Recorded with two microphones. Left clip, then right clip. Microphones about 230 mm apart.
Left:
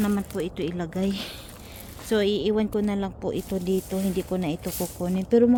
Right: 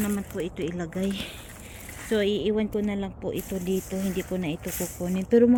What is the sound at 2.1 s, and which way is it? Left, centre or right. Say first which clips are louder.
Speech: left 2 dB; centre.